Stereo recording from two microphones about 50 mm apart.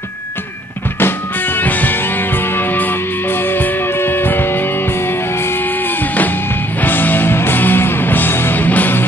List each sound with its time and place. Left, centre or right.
0.9 s music: left
6.8 s music: left